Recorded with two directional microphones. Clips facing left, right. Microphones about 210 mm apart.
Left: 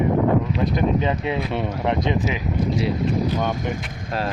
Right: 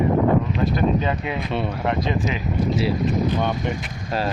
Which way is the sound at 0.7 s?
20° left (ahead or behind).